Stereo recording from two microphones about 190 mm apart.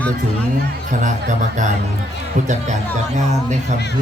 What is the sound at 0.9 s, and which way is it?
Speech, 40° right (ahead or behind).